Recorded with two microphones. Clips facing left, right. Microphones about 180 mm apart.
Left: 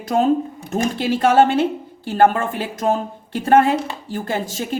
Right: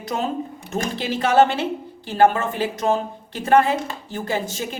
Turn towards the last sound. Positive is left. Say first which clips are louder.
# left 1 dB
turn(degrees=50)  # may be behind; listen again after turning